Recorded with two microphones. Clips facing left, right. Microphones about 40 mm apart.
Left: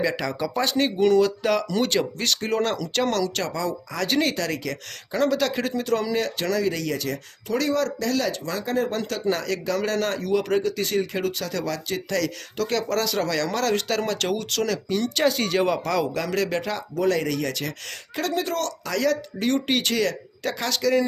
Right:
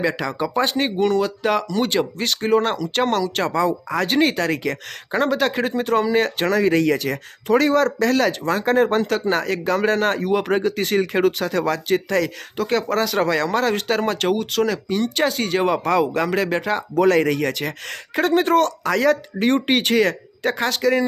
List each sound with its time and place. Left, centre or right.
0.2 s speech: centre
1.0 s speech: centre; by 6.1 s right
6.1 s speech: right
12.0 s speech: right
17.0 s speech: right